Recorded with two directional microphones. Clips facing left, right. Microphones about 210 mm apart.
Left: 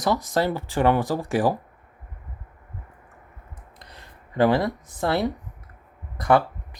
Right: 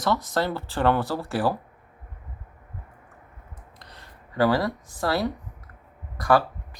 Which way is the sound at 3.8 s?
20° left (ahead or behind).